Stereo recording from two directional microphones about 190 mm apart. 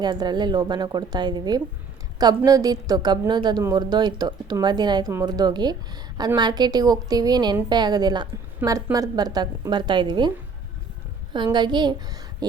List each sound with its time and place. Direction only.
0.0 s a woman's voice: 20° right (ahead or behind)
11.3 s a woman's voice: 25° right (ahead or behind)